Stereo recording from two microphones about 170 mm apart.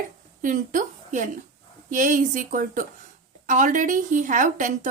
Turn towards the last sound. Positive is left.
turn(degrees=-45)  # may be behind; listen again after turning